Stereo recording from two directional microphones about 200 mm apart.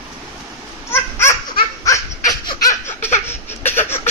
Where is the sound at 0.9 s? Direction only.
15° left (ahead or behind).